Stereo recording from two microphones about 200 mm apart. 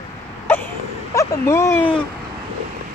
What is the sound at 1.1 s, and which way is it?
Speech, 15° left (ahead or behind).